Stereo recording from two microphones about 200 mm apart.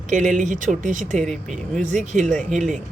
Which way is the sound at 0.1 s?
40° right (ahead or behind).